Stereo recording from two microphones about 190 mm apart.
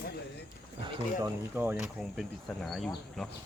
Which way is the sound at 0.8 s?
25° right (ahead or behind).